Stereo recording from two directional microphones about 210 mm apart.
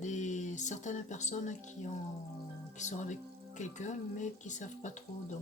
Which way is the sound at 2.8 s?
35° left (ahead or behind).